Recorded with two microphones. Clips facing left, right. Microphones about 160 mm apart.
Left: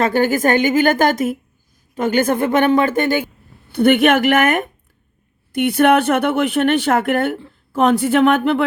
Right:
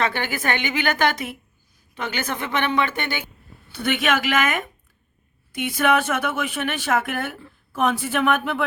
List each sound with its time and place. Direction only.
0.0 s a woman's voice: 45° left (ahead or behind)
3.7 s speech: 55° left (ahead or behind)